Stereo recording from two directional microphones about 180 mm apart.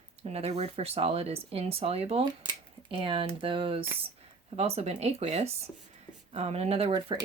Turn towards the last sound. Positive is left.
turn(degrees=-25)  # may be behind; listen again after turning